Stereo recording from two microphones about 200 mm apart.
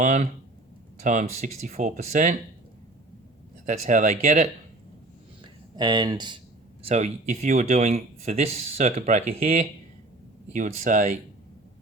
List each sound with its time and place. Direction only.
0.0 s speech: 40° right (ahead or behind)
3.7 s speech: 40° right (ahead or behind)
5.4 s a sound: 20° right (ahead or behind)
6.8 s speech: 35° right (ahead or behind)